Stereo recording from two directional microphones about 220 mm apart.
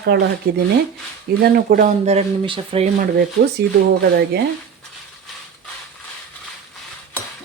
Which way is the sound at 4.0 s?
50° right (ahead or behind).